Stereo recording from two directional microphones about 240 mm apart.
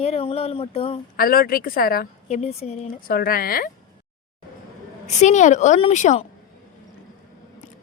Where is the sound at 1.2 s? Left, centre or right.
Left.